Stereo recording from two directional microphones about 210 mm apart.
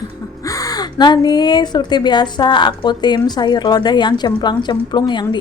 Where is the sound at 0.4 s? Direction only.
15° left (ahead or behind).